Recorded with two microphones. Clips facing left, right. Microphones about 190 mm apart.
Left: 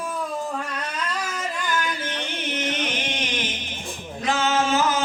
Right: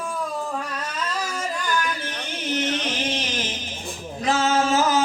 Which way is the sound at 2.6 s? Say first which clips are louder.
Right 2 dB; 35° right (ahead or behind).